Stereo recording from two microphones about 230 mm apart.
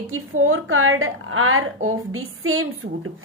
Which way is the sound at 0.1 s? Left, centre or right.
Right.